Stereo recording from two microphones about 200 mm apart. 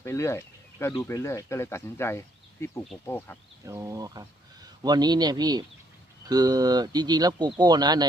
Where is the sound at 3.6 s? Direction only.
15° right (ahead or behind).